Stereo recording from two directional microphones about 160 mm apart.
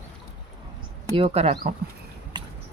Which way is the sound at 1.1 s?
35° right (ahead or behind).